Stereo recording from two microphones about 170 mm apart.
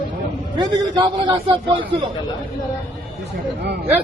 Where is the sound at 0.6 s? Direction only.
25° right (ahead or behind).